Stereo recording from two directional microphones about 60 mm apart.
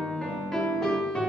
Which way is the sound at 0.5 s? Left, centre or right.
Centre.